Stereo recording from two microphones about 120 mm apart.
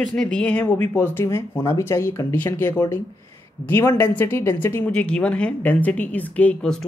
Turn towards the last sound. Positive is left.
turn(degrees=5)  # may be behind; listen again after turning